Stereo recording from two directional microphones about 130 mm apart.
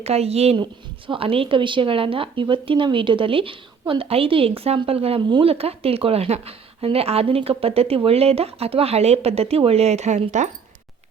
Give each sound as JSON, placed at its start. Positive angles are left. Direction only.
{"t": 0.0, "sound": "speech", "side_deg": -55}
{"t": 0.5, "sound": "speech", "side_deg": -40}